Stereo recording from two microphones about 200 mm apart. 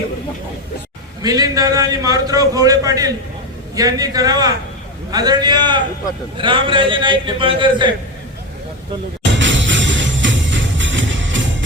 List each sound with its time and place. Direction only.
1.2 s a man's voice: 20° right (ahead or behind)
9.2 s music: 65° right (ahead or behind)